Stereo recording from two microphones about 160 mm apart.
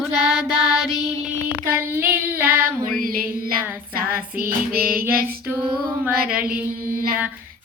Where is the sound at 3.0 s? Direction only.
65° right (ahead or behind).